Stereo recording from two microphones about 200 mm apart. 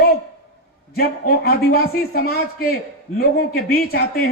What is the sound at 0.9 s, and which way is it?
A man's voice, 50° left (ahead or behind).